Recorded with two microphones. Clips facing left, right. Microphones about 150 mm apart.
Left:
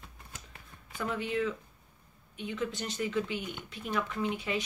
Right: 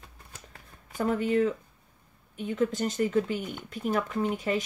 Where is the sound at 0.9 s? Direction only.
45° right (ahead or behind).